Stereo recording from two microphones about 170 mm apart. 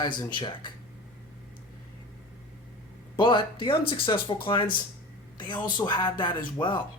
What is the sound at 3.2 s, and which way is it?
Speech, 30° left (ahead or behind).